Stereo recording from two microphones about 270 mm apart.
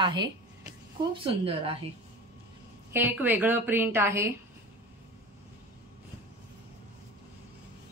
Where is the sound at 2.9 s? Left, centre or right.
Centre.